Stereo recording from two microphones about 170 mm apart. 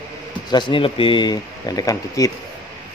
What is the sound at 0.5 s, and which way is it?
Speech, 25° left (ahead or behind).